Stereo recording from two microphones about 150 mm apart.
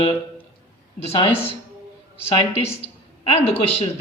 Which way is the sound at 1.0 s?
40° left (ahead or behind).